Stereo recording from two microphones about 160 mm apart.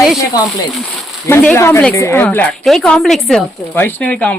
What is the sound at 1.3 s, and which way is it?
A woman's voice, 10° left (ahead or behind).